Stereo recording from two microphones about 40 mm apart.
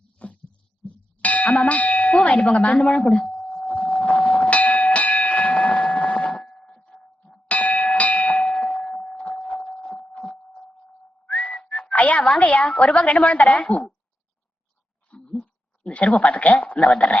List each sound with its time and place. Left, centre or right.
0.2 s heart sounds: left
1.2 s speech: left
3.7 s a sound: left
6.3 s a sound: centre
6.8 s bell: left
8.6 s a sound: left
11.3 s whistling: left
11.7 s a woman's voice: left
15.3 s a woman's voice: left